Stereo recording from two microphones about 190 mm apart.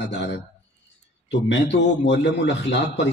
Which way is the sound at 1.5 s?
65° left (ahead or behind).